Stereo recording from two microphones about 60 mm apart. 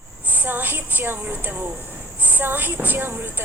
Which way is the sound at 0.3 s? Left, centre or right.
Right.